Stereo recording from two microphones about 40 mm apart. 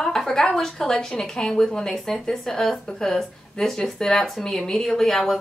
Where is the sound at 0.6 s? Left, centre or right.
Centre.